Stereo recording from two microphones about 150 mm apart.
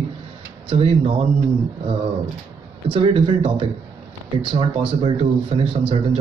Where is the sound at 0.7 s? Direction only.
35° right (ahead or behind).